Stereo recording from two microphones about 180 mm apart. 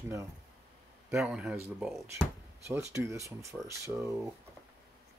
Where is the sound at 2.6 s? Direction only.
15° right (ahead or behind).